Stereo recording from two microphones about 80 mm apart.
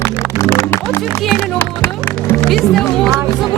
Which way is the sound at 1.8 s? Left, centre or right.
Left.